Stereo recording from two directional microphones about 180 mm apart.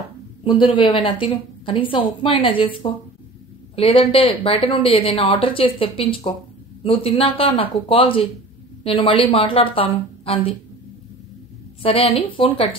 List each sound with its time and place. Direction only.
0.4 s a sound: 25° left (ahead or behind)
0.7 s a woman's voice: 25° left (ahead or behind)
11.8 s speech: 30° left (ahead or behind)